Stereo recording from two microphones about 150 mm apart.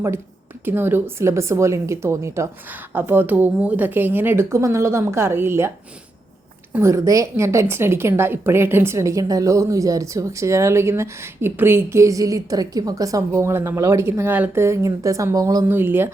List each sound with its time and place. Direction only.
0.6 s speech: 15° right (ahead or behind)
6.7 s a woman's voice: 20° right (ahead or behind)